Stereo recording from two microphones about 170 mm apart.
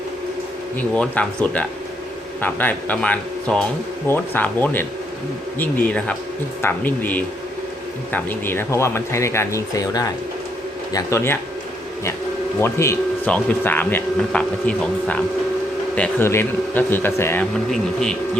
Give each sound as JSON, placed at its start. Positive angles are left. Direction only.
{"t": 0.8, "sound": "speech", "side_deg": 10}
{"t": 12.5, "sound": "speech", "side_deg": 15}
{"t": 16.0, "sound": "speech", "side_deg": 15}